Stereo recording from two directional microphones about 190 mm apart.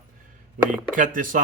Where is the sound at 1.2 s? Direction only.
45° right (ahead or behind).